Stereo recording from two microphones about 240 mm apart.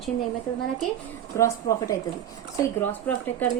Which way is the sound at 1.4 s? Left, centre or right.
Centre.